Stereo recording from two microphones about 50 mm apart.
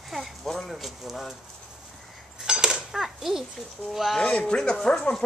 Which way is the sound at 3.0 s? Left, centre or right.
Centre.